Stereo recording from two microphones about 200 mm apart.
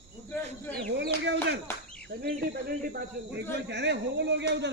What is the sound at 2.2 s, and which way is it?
Speech, 50° right (ahead or behind).